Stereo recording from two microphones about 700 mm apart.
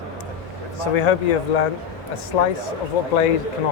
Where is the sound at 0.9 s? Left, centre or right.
Left.